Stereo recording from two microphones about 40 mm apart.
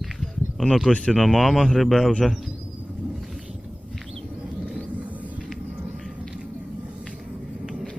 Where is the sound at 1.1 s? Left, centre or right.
Centre.